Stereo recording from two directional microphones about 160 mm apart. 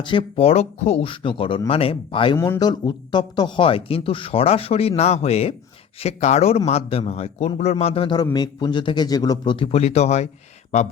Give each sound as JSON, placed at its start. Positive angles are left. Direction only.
{"t": 0.0, "sound": "a man's voice", "side_deg": 30}
{"t": 2.4, "sound": "a man's voice", "side_deg": 20}